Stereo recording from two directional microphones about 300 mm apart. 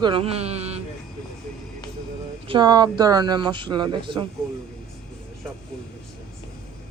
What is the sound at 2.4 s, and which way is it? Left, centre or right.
Speech, centre.